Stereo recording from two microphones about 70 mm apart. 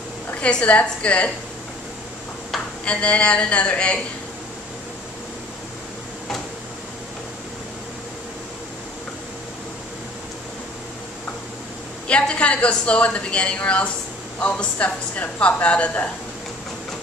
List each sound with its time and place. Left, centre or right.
0.3 s a woman's voice: centre
2.8 s a woman's voice: centre
12.1 s a woman's voice: centre